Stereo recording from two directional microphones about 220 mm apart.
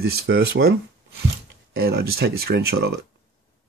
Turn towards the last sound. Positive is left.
turn(degrees=-45)  # may be behind; listen again after turning